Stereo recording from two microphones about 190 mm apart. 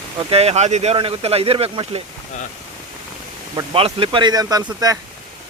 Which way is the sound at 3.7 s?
30° right (ahead or behind).